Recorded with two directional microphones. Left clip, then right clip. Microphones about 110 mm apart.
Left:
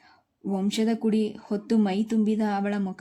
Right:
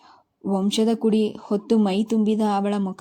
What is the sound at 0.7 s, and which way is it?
Speech, 25° right (ahead or behind).